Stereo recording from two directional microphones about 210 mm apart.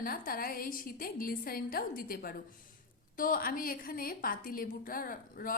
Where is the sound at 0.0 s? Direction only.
45° left (ahead or behind).